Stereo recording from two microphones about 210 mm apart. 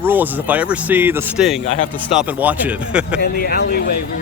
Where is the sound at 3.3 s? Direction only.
50° left (ahead or behind).